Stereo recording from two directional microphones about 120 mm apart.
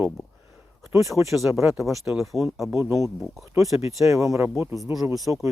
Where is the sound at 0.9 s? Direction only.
25° right (ahead or behind).